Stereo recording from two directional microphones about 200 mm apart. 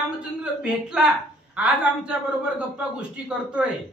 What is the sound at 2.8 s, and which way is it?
Speech, 5° right (ahead or behind).